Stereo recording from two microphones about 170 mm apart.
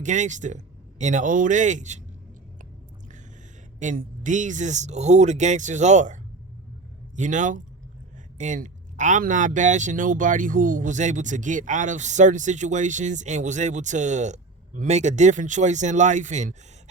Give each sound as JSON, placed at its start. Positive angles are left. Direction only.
{"t": 0.0, "sound": "a man's voice", "side_deg": -45}
{"t": 3.8, "sound": "a man's voice", "side_deg": -45}
{"t": 7.2, "sound": "a man's voice", "side_deg": -45}